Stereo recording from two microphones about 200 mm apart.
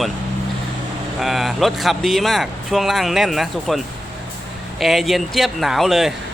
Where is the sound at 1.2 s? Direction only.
Centre (ahead or behind).